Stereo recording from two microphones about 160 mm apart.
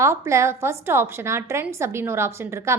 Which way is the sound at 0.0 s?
15° right (ahead or behind).